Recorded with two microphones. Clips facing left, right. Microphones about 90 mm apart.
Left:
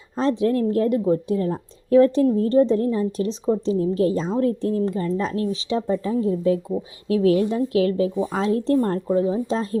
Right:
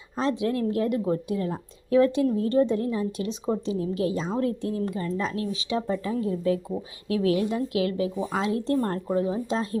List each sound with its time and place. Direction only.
0.2 s speech: 35° left (ahead or behind)